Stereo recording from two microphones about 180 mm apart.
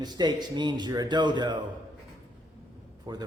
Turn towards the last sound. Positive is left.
turn(degrees=-20)  # may be behind; listen again after turning